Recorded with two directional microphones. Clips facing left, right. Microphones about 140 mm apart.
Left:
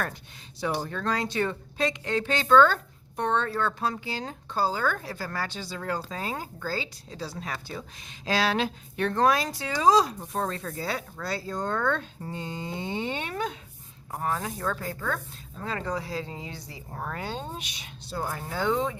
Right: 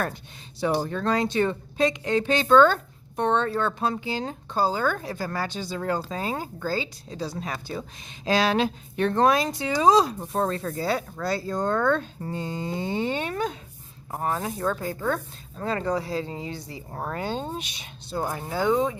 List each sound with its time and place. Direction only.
0.6 s speech: 30° right (ahead or behind)
14.1 s speech: 30° right (ahead or behind)
15.6 s speech: 40° right (ahead or behind); by 18.9 s 15° right (ahead or behind)